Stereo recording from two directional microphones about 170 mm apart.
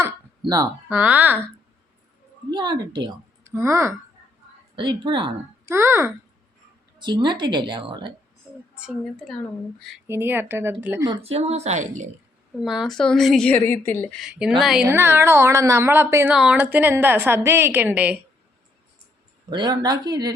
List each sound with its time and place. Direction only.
0.0 s a sound: 20° right (ahead or behind)
0.9 s a woman's voice: 10° right (ahead or behind)
2.5 s a woman's voice: 25° right (ahead or behind)
3.4 s speech: 15° right (ahead or behind)
4.7 s a woman's voice: 30° right (ahead or behind)
5.6 s a woman's voice: 15° right (ahead or behind)
7.0 s a woman's voice: 25° right (ahead or behind)
8.7 s a woman's voice: centre (ahead or behind)
10.1 s a woman's voice: 10° right (ahead or behind)
11.2 s speech: 35° right (ahead or behind)
12.5 s a woman's voice: centre (ahead or behind)
14.2 s a woman's voice: 5° right (ahead or behind)
14.8 s a woman's voice: 15° right (ahead or behind)
19.5 s a woman's voice: 25° right (ahead or behind)